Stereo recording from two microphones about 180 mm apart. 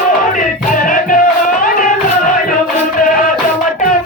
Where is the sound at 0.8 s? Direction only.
50° left (ahead or behind).